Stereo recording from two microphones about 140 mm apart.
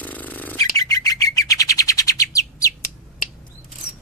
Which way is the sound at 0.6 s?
25° left (ahead or behind).